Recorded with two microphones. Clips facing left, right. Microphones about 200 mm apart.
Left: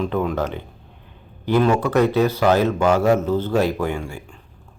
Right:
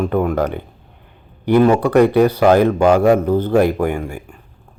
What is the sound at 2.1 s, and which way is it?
Speech, 55° right (ahead or behind).